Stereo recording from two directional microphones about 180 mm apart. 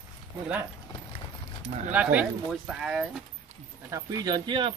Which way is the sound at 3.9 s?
20° right (ahead or behind).